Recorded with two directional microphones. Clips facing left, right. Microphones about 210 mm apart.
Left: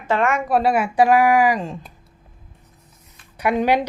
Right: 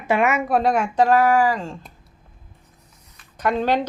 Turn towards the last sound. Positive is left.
turn(degrees=10)  # may be behind; listen again after turning